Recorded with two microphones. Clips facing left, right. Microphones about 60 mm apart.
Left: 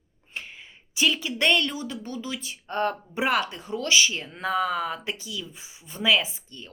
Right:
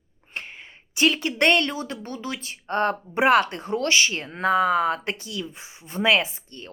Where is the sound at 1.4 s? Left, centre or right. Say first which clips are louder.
Right 3 dB; right.